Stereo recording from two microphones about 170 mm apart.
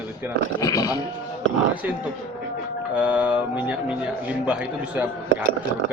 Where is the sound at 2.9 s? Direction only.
5° right (ahead or behind).